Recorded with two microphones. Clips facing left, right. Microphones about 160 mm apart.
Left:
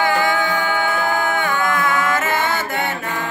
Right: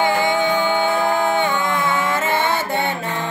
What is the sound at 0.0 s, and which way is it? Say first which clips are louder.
Music: right 1 dB; 25° right (ahead or behind).